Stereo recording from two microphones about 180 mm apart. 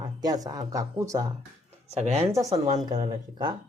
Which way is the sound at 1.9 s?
35° right (ahead or behind).